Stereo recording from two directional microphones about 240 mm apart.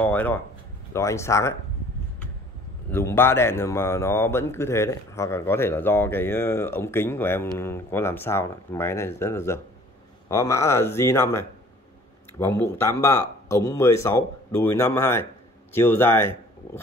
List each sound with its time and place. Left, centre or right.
0.0 s a man's voice: centre
2.9 s a man's voice: centre